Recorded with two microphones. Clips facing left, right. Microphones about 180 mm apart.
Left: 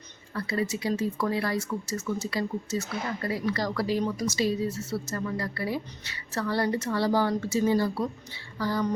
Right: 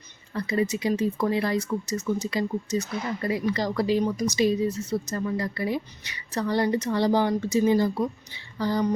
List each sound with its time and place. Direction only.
0.3 s speech: 20° right (ahead or behind)